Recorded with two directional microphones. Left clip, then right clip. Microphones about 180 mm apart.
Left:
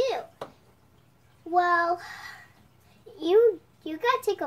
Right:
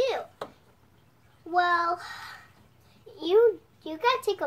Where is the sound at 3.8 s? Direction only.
10° right (ahead or behind).